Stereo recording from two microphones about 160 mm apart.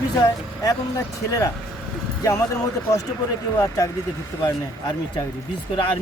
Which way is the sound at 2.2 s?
20° left (ahead or behind).